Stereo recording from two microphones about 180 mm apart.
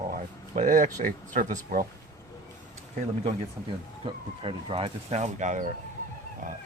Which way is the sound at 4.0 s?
30° right (ahead or behind).